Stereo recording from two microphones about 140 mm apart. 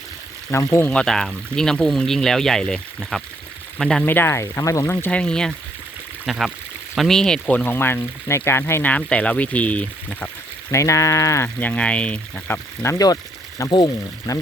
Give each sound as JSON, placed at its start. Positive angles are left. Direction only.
{"t": 0.5, "sound": "speech", "side_deg": 20}
{"t": 0.9, "sound": "speech", "side_deg": 5}
{"t": 4.0, "sound": "speech", "side_deg": 15}
{"t": 10.7, "sound": "speech", "side_deg": 20}
{"t": 12.8, "sound": "speech", "side_deg": 25}